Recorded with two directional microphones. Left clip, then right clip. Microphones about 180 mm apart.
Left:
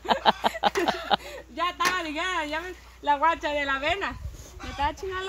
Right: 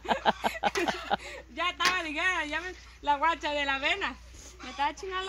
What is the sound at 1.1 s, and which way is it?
Speech, centre (ahead or behind).